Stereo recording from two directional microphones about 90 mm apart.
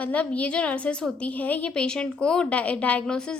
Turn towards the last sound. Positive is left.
turn(degrees=10)  # may be behind; listen again after turning